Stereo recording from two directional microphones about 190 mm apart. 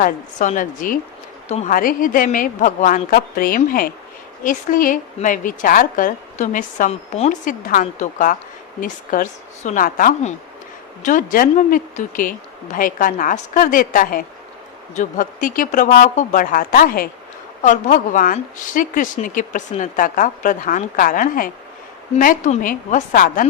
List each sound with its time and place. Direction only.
0.0 s a woman's voice: 40° left (ahead or behind)